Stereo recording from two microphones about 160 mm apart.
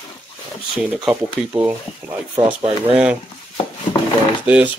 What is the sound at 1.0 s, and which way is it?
Speech, 10° right (ahead or behind).